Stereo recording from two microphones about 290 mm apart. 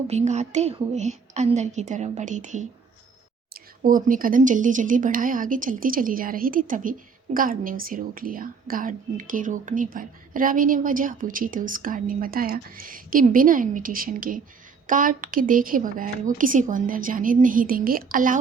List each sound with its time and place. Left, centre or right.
0.1 s a woman's voice: right